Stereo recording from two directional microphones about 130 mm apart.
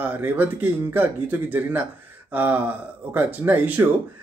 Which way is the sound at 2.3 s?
15° right (ahead or behind).